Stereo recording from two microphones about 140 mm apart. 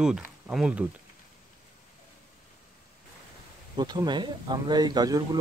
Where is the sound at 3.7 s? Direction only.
30° right (ahead or behind).